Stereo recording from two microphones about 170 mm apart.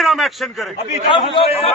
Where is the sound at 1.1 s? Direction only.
30° left (ahead or behind).